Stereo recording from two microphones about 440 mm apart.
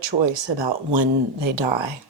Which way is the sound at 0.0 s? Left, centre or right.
Right.